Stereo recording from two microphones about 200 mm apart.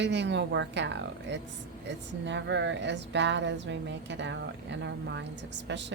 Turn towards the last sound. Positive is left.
turn(degrees=-60)  # may be behind; listen again after turning